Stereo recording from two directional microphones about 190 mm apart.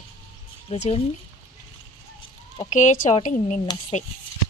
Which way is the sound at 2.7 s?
40° left (ahead or behind).